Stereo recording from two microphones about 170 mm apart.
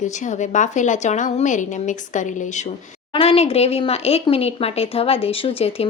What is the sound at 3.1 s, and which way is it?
Speech, 35° left (ahead or behind).